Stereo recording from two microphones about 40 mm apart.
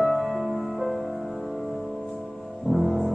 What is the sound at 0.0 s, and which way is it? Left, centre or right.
Music, centre.